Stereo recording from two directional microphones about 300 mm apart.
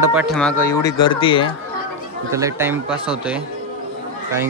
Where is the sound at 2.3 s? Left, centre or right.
Centre.